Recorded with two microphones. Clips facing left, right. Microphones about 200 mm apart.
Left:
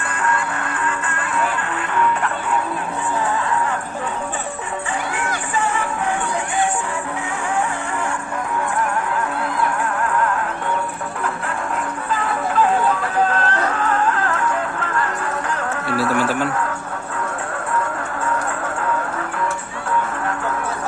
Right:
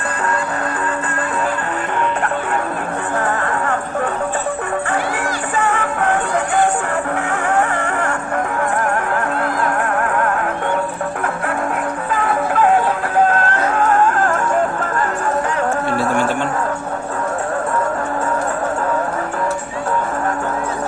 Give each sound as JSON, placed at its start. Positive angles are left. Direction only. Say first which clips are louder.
{"t": 3.2, "sound": "music", "louder": "right 1 dB", "side_deg": -55}
{"t": 5.5, "sound": "music", "louder": "right 3 dB", "side_deg": -60}
{"t": 7.5, "sound": "music", "louder": "right 4 dB", "side_deg": -60}
{"t": 9.6, "sound": "music", "louder": "right 3 dB", "side_deg": -60}
{"t": 12.1, "sound": "music", "louder": "right 2 dB", "side_deg": -55}
{"t": 16.0, "sound": "a sound", "louder": "right 1 dB", "side_deg": 5}